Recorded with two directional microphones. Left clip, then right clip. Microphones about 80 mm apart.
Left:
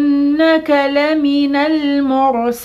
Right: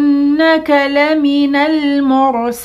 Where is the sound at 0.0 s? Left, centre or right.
Right.